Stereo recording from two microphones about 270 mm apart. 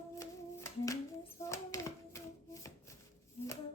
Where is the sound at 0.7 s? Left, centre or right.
Centre.